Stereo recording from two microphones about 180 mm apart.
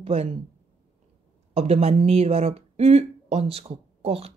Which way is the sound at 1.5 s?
35° right (ahead or behind).